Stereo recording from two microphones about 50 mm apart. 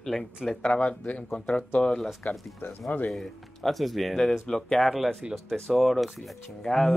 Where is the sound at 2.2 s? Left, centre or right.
Left.